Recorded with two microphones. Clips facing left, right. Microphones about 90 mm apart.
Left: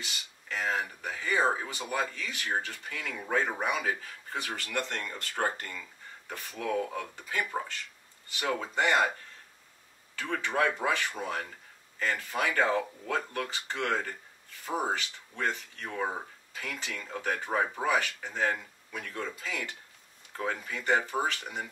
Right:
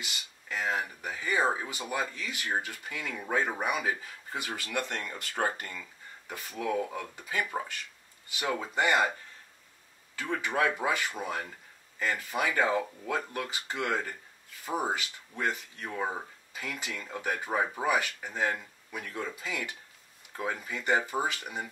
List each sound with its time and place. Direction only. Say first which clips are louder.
0.0 s speech: even; 10° right (ahead or behind)
10.1 s speech: even; 5° right (ahead or behind)